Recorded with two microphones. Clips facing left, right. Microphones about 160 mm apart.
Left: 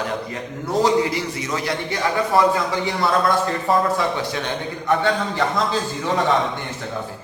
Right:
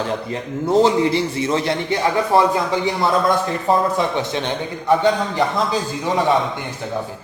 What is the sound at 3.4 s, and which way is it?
A man's voice, 20° right (ahead or behind).